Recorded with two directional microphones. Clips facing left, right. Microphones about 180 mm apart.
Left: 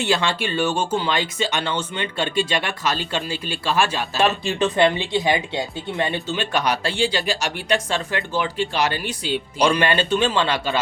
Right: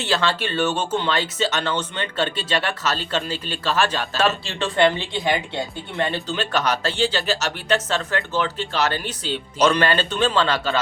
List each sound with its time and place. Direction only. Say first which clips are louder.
0.0 s speech: left 1 dB; 15° left (ahead or behind)